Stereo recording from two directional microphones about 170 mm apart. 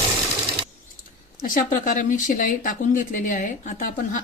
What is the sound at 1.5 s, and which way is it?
Speech, 50° left (ahead or behind).